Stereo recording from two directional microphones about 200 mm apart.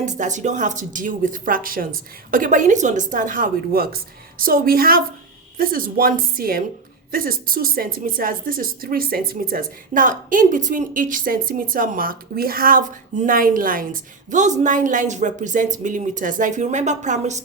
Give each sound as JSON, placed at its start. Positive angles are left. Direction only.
{"t": 0.0, "sound": "a woman's voice", "side_deg": -35}